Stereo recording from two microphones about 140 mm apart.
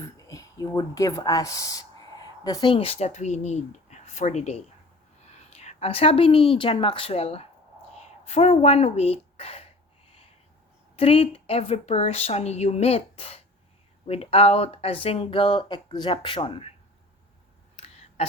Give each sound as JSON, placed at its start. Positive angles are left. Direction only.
{"t": 0.0, "sound": "a woman's voice", "side_deg": 25}
{"t": 10.9, "sound": "speech", "side_deg": 45}
{"t": 17.7, "sound": "a sound", "side_deg": 45}